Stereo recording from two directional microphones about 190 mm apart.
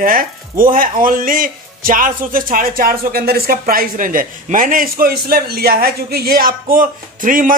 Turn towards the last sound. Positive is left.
turn(degrees=-45)  # may be behind; listen again after turning